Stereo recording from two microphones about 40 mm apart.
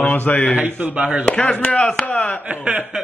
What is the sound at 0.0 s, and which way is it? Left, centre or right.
Speech, left.